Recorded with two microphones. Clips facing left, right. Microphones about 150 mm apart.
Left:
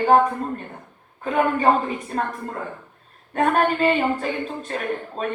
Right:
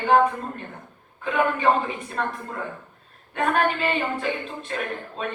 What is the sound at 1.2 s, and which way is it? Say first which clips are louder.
A woman's voice: left 2 dB; 40° left (ahead or behind).